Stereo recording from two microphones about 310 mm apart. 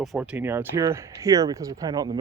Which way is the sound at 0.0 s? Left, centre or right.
Centre.